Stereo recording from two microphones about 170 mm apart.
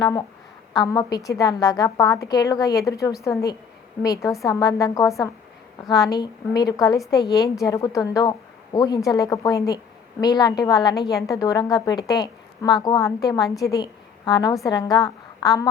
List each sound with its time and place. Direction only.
0.0 s a woman's voice: 20° left (ahead or behind)